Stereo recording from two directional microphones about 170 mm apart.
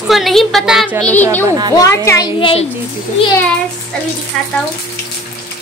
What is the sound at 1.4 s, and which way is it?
Speech, 20° right (ahead or behind).